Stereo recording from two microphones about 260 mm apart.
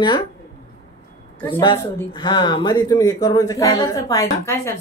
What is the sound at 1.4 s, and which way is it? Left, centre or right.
Speech, centre.